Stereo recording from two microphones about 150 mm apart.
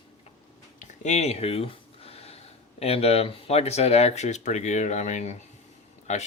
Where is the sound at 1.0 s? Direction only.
45° left (ahead or behind).